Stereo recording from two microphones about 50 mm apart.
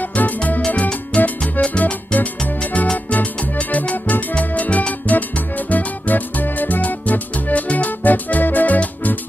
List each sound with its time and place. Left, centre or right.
0.1 s music: left
3.9 s music: left
4.4 s music: left